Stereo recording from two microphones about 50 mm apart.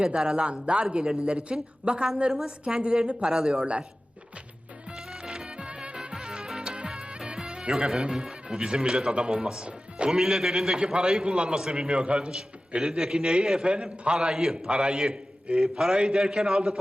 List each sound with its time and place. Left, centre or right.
0.0 s a man's voice: centre
4.9 s music: centre
10.1 s a man's voice: centre